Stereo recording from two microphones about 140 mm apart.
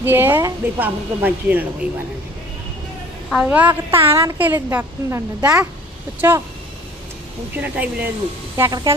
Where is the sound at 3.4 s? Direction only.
10° right (ahead or behind).